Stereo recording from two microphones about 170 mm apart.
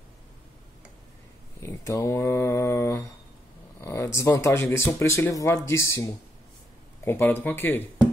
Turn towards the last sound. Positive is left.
turn(degrees=10)  # may be behind; listen again after turning